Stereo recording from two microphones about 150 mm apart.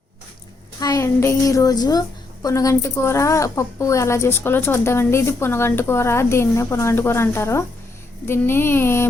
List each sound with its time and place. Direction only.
0.8 s a woman's voice: 25° left (ahead or behind)